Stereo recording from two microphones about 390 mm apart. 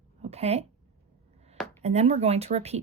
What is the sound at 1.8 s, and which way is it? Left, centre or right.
Speech, centre.